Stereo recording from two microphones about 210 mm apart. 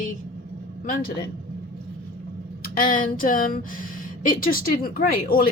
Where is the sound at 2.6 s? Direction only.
40° left (ahead or behind).